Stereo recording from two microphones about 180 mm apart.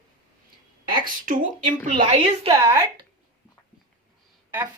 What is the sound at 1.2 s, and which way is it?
Speech, 50° right (ahead or behind).